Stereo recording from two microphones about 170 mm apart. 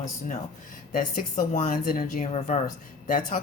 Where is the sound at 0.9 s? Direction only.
50° left (ahead or behind).